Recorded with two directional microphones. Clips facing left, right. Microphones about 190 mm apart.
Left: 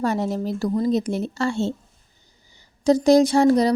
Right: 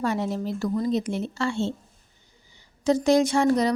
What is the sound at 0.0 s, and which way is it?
A woman's voice, 40° left (ahead or behind).